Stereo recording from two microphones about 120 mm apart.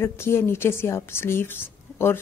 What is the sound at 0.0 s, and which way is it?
A woman's voice, 20° left (ahead or behind).